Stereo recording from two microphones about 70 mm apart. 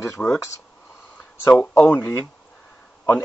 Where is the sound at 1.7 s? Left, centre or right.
Left.